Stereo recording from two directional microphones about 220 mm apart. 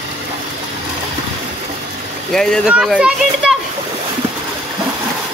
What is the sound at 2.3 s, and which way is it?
Speech, centre (ahead or behind).